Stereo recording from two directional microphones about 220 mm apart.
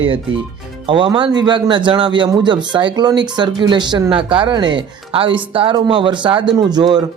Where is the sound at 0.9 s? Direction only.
20° right (ahead or behind).